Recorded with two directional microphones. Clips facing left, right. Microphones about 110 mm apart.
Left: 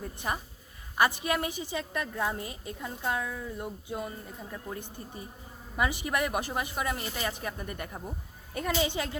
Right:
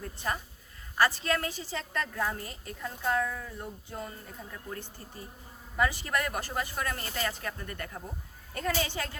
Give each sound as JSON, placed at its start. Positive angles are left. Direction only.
{"t": 0.0, "sound": "a woman's voice", "side_deg": 15}